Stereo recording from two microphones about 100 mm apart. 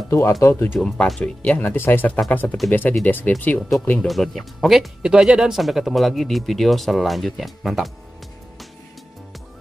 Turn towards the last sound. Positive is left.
turn(degrees=0)  # may be behind; listen again after turning